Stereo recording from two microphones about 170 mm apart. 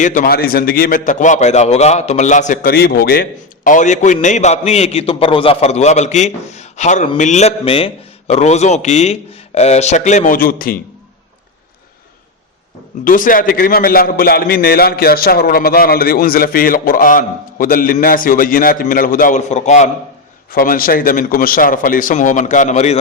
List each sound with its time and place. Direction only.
0.0 s a man's voice: 50° left (ahead or behind)
13.1 s a man's voice: 50° left (ahead or behind)
20.5 s a man's voice: 55° left (ahead or behind)